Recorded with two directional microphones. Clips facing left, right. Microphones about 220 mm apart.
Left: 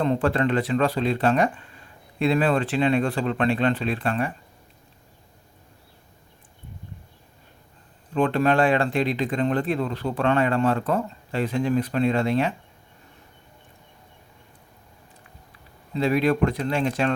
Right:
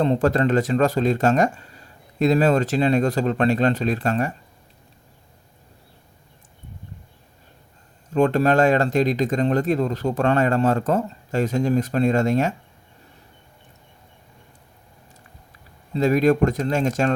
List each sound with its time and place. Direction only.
0.0 s speech: 40° right (ahead or behind)
8.1 s speech: 40° right (ahead or behind)
16.0 s speech: 45° right (ahead or behind)